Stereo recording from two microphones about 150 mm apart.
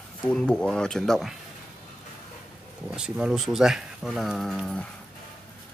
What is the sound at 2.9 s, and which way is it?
Speech, 5° right (ahead or behind).